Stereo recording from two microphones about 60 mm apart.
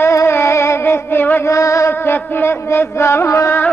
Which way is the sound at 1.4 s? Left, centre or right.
Left.